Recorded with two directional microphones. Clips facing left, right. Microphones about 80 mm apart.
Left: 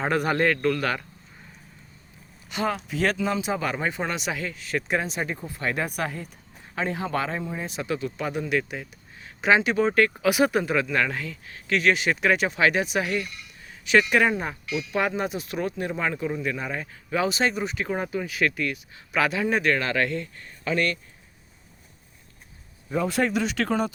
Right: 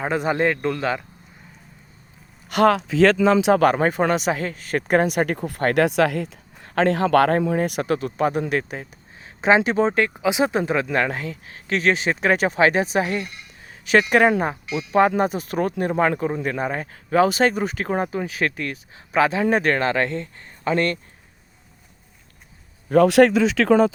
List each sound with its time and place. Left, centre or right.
0.0 s a man's voice: centre
2.5 s speech: right
3.6 s a man's voice: right
14.1 s speech: right
14.5 s a man's voice: right
15.0 s speech: right
22.9 s speech: right